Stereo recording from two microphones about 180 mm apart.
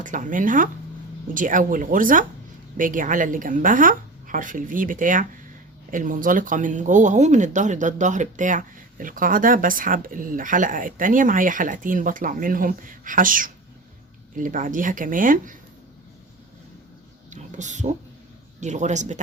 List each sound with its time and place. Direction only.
0.0 s speech: 45° right (ahead or behind)
17.2 s a sound: 40° right (ahead or behind)
18.6 s a man's voice: 40° right (ahead or behind)